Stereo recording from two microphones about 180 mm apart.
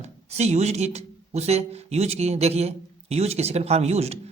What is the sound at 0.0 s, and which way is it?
Speech, 35° right (ahead or behind).